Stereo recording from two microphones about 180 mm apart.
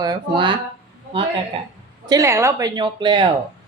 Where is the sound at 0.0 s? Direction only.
25° right (ahead or behind).